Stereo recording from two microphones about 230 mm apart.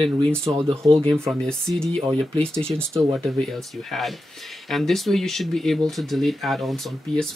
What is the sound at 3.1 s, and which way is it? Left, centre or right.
Speech, centre.